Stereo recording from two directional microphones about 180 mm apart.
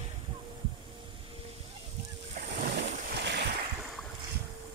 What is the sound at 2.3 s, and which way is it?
Boat, 55° right (ahead or behind).